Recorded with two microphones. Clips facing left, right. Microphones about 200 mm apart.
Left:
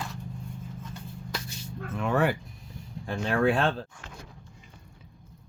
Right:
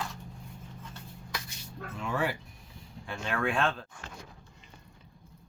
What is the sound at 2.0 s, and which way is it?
Speech, 60° left (ahead or behind).